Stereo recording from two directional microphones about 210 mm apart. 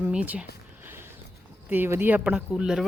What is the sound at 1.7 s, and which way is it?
Speech, 10° right (ahead or behind).